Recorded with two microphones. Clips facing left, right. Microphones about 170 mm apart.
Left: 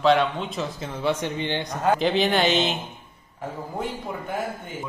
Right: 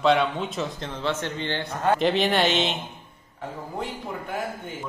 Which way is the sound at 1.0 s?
15° left (ahead or behind).